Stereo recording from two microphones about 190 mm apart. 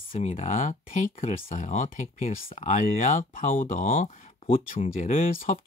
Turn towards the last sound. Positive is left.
turn(degrees=30)  # may be behind; listen again after turning